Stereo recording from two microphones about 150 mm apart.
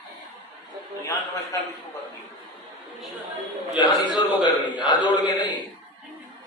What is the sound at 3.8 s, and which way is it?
A man's voice, 30° left (ahead or behind).